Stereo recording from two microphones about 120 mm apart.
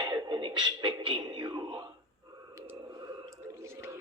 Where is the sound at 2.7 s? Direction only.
35° right (ahead or behind).